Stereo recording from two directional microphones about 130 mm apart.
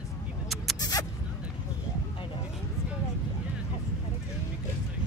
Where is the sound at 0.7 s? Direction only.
30° left (ahead or behind).